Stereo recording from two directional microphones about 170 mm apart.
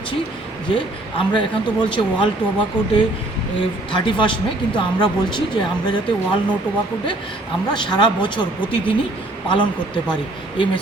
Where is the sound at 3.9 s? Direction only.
30° left (ahead or behind).